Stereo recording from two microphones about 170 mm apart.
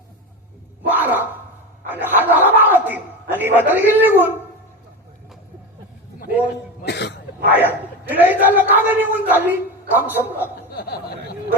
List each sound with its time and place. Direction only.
0.9 s a sound: 10° right (ahead or behind)
6.8 s cough: 80° left
7.5 s a man's voice: 10° right (ahead or behind)
10.7 s snicker: 70° left (ahead or behind)